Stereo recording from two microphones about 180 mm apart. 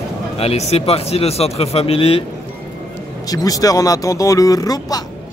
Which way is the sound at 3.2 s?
20° left (ahead or behind).